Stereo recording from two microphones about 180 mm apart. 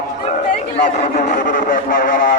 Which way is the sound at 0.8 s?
40° left (ahead or behind).